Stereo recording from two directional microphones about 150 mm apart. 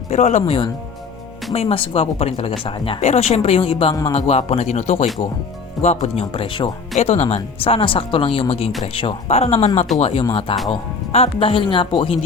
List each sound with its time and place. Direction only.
0.1 s a man's voice: 45° left (ahead or behind)